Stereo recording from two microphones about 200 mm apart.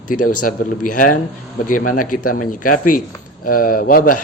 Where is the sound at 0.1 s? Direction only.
45° left (ahead or behind).